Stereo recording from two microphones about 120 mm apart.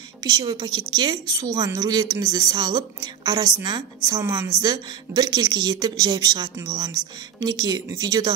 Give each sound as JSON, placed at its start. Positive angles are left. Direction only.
{"t": 0.2, "sound": "a woman's voice", "side_deg": -35}